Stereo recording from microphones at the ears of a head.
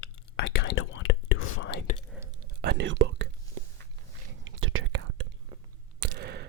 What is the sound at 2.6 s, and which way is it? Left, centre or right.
Whispering, right.